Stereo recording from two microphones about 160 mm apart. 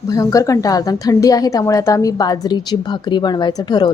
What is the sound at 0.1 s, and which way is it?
A woman's voice, 20° left (ahead or behind).